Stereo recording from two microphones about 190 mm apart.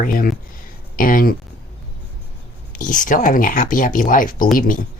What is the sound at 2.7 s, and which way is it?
Speech, 45° left (ahead or behind).